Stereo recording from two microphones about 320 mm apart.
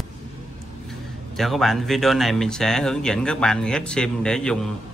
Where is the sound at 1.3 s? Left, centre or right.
Centre.